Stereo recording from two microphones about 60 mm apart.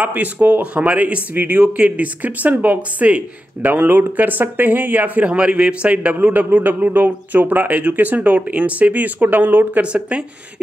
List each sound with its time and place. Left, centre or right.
0.0 s speech: right
5.3 s speech: centre
9.9 s speech: centre